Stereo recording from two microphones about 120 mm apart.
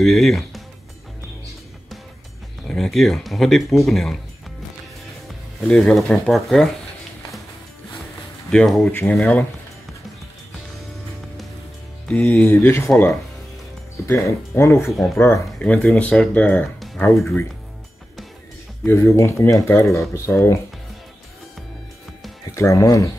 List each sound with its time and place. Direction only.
0.0 s speech: centre (ahead or behind)
2.7 s speech: centre (ahead or behind)
5.6 s speech: centre (ahead or behind)
8.5 s speech: 5° left (ahead or behind)
9.2 s speech: 15° left (ahead or behind)
12.1 s speech: 10° left (ahead or behind)
14.0 s speech: 20° left (ahead or behind)
17.0 s speech: 25° left (ahead or behind)
18.9 s speech: 20° left (ahead or behind)
22.5 s speech: 25° left (ahead or behind)